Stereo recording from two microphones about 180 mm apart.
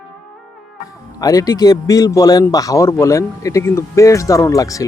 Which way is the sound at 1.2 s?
20° left (ahead or behind).